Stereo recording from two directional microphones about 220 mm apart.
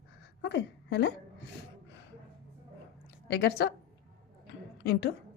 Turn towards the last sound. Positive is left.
turn(degrees=50)  # may be behind; listen again after turning